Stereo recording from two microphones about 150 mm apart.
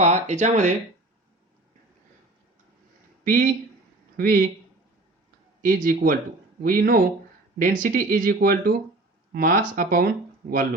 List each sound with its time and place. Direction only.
0.0 s speech: 50° right (ahead or behind)
3.2 s speech: 70° right (ahead or behind)
5.6 s speech: 70° right (ahead or behind)